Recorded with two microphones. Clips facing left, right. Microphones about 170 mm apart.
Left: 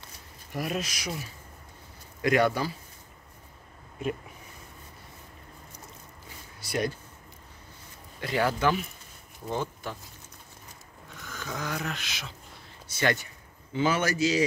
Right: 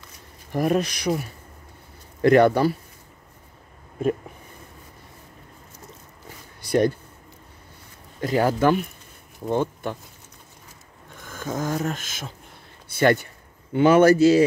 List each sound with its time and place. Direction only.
0.5 s speech: 50° right (ahead or behind)
2.2 s speech: 55° right (ahead or behind)
8.2 s speech: 40° right (ahead or behind)
11.1 s speech: 50° right (ahead or behind)